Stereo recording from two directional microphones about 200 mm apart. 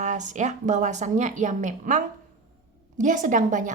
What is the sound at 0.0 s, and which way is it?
A woman's voice, 35° right (ahead or behind).